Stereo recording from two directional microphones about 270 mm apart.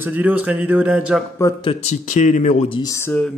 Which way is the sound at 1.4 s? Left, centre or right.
Centre.